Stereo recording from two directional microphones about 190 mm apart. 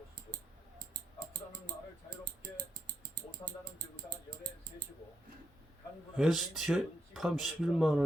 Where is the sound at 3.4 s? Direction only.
20° left (ahead or behind).